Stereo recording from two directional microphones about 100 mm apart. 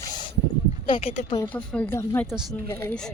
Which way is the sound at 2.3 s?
5° right (ahead or behind).